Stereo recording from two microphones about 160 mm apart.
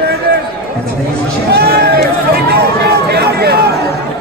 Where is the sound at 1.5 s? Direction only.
90° right.